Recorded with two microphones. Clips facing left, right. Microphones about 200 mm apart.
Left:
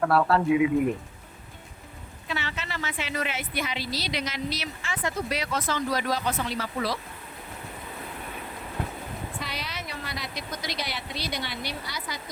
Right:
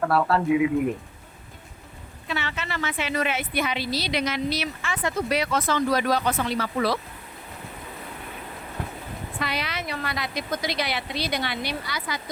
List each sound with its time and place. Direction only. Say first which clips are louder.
0.0 s a man's voice: even; centre (ahead or behind)
2.3 s a woman's voice: right 3 dB; 60° right (ahead or behind)
9.4 s a woman's voice: right 6 dB; 70° right (ahead or behind); by 12.2 s 85° right